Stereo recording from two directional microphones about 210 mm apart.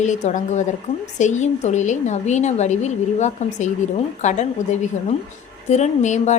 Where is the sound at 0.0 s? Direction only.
35° left (ahead or behind).